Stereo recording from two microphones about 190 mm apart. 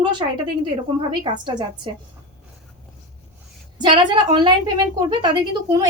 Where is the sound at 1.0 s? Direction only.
25° right (ahead or behind).